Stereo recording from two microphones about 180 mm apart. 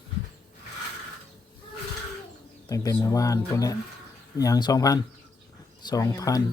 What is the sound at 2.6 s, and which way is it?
Speech, 20° left (ahead or behind).